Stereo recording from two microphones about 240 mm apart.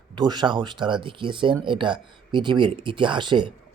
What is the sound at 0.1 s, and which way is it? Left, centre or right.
Speech, centre.